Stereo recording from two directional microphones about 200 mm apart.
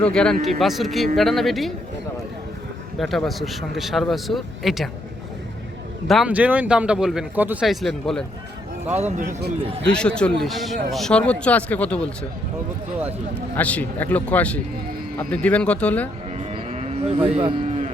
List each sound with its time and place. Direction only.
0.0 s speech: 5° left (ahead or behind)
3.0 s speech: centre (ahead or behind)
6.1 s speech: 5° right (ahead or behind)
9.0 s speech: 35° right (ahead or behind)
9.9 s speech: 5° left (ahead or behind)
13.6 s a man's voice: 5° left (ahead or behind)
16.5 s cattle: 30° right (ahead or behind)